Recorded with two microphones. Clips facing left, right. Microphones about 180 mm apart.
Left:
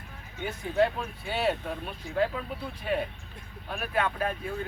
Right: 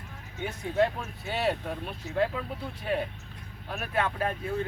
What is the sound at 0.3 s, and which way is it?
Speech, 5° right (ahead or behind).